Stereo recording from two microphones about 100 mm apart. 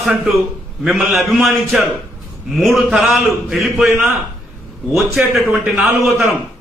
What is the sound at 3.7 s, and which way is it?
Speech, 20° right (ahead or behind).